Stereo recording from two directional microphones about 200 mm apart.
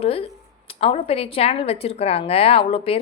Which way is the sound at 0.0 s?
30° left (ahead or behind).